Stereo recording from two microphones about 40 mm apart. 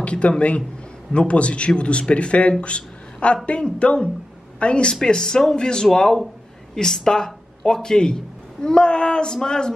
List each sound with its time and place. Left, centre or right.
0.0 s a man's voice: left
2.6 s a sound: left
3.4 s speech: left